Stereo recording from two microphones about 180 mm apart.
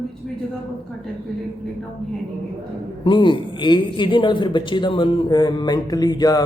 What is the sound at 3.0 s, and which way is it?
A man's voice, 25° left (ahead or behind).